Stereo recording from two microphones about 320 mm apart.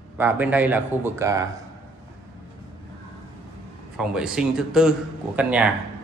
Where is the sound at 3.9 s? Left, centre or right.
Centre.